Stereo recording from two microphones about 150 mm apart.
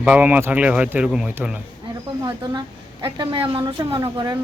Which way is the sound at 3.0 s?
30° right (ahead or behind).